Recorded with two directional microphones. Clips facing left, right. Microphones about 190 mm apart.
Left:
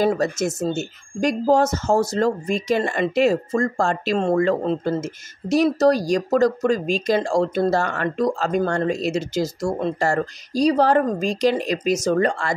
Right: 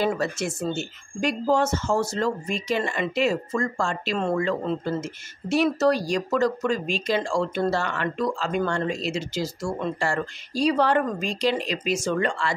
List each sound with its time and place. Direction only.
0.0 s speech: 40° left (ahead or behind)